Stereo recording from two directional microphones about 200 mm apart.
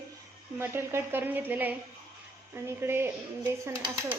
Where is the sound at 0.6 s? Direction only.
10° right (ahead or behind).